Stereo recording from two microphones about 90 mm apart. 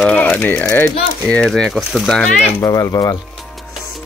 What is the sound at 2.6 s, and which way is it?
Speech, 45° left (ahead or behind).